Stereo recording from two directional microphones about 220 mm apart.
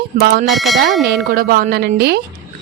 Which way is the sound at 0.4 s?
Centre (ahead or behind).